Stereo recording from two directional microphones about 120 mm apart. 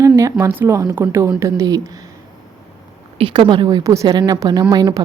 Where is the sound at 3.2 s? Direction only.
45° right (ahead or behind).